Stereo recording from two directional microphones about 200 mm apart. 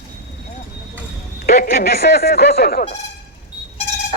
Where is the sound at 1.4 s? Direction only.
50° left (ahead or behind).